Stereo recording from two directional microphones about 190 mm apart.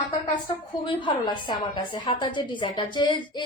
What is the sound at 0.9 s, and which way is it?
A woman's voice, 25° left (ahead or behind).